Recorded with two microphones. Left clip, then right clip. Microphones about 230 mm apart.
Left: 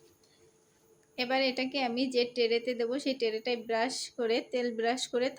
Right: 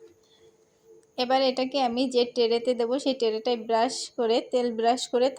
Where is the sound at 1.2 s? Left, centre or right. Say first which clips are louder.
Right 6 dB; centre.